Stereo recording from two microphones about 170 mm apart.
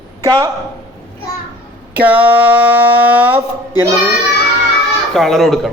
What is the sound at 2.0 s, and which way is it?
Speech, 10° right (ahead or behind).